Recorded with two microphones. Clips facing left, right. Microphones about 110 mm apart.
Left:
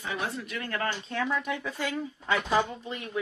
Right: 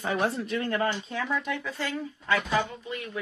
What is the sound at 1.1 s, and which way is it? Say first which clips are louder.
Speech: left 1 dB; centre (ahead or behind).